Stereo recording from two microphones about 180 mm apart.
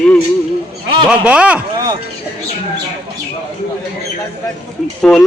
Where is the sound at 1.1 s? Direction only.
5° right (ahead or behind).